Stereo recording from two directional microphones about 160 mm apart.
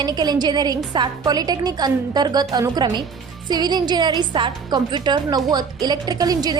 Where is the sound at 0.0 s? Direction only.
25° right (ahead or behind).